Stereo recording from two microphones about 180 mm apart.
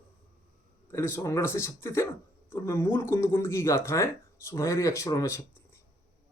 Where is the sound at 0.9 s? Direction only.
15° left (ahead or behind).